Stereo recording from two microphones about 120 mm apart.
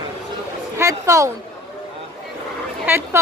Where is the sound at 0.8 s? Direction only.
25° right (ahead or behind).